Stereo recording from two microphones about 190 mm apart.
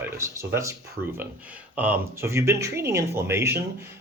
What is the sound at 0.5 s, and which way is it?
A man's voice, 15° right (ahead or behind).